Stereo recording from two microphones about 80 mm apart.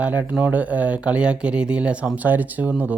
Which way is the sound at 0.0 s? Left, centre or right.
Centre.